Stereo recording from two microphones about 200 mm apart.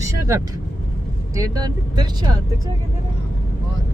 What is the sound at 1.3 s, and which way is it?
Speech, 15° right (ahead or behind).